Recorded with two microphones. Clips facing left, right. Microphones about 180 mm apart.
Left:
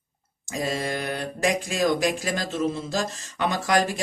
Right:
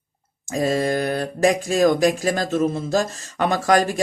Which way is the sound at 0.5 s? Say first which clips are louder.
Right 7 dB; 45° right (ahead or behind).